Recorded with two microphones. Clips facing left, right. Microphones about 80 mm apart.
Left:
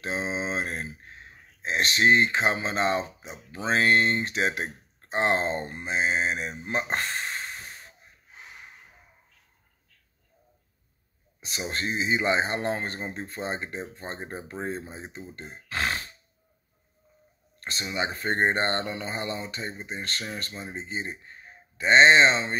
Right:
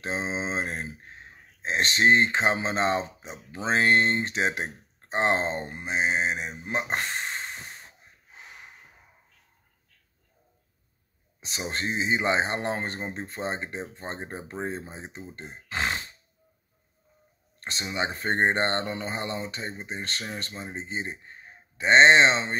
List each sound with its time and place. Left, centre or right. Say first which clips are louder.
0.0 s speech: even; right
5.6 s mantra: even; centre
6.6 s a sound: even; centre
11.7 s speech: even; right
14.5 s mantra: even; centre
15.3 s speech: even; right
17.6 s speech: even; right